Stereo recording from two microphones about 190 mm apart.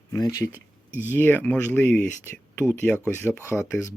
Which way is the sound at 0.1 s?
20° left (ahead or behind).